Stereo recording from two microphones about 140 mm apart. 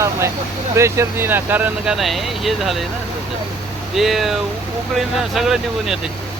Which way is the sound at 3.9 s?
Centre (ahead or behind).